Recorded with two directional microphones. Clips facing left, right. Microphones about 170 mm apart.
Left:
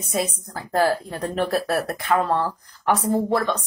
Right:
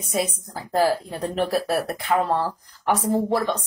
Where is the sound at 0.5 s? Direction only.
15° right (ahead or behind).